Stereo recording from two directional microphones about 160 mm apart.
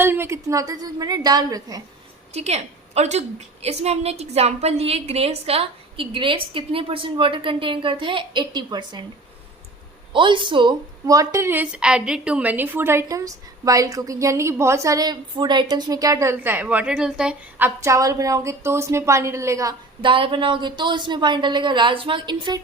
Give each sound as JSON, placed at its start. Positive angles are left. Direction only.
{"t": 0.0, "sound": "speech", "side_deg": -15}
{"t": 2.3, "sound": "a woman's voice", "side_deg": -40}
{"t": 10.1, "sound": "a woman's voice", "side_deg": -30}
{"t": 17.7, "sound": "speech", "side_deg": -20}
{"t": 20.0, "sound": "speech", "side_deg": -30}